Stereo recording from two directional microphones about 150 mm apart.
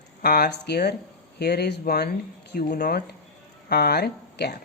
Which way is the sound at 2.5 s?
70° left (ahead or behind).